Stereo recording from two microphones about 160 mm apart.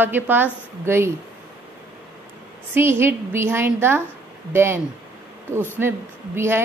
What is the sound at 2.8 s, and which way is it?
A woman's voice, 15° right (ahead or behind).